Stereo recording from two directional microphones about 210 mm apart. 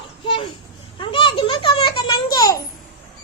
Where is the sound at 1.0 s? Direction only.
25° left (ahead or behind).